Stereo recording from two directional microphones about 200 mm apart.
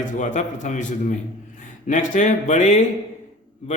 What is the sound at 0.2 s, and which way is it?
A man's voice, 40° left (ahead or behind).